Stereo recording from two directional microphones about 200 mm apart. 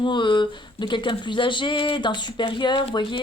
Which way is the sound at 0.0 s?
25° left (ahead or behind).